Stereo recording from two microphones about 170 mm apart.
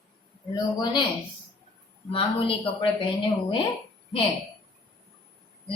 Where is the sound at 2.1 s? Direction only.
30° left (ahead or behind).